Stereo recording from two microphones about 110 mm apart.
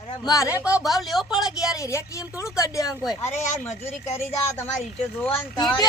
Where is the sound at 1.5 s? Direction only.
30° left (ahead or behind).